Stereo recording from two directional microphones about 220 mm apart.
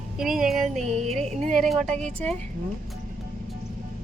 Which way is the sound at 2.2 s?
5° left (ahead or behind).